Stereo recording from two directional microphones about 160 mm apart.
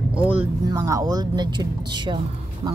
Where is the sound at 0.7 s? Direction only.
20° right (ahead or behind).